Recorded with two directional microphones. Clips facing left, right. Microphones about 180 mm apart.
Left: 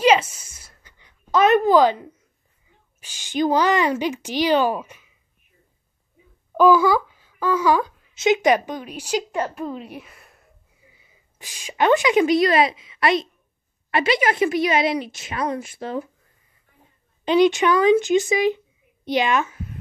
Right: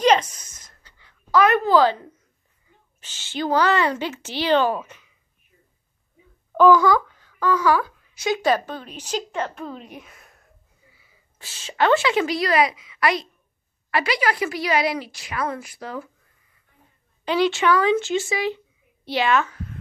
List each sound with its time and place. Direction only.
0.0 s a sound: 5° left (ahead or behind)
1.3 s a child's voice: 20° left (ahead or behind)
6.5 s a child's voice: 10° left (ahead or behind)
10.9 s a woman's voice: 15° left (ahead or behind)
17.2 s speech: 20° left (ahead or behind)